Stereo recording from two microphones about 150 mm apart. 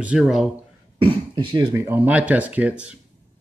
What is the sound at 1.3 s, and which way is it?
Speech, 35° right (ahead or behind).